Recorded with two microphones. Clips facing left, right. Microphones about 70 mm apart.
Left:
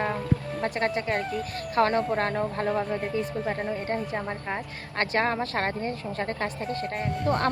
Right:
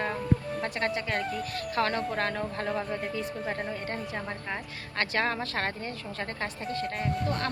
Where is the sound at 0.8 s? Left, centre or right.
Left.